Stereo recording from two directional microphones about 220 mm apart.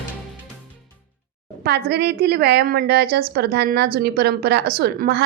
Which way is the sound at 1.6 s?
45° right (ahead or behind).